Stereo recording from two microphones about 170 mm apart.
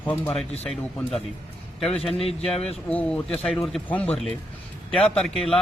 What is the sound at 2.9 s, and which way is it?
Speech, 10° left (ahead or behind).